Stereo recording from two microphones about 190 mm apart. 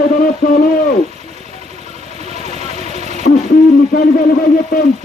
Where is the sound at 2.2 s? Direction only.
35° right (ahead or behind).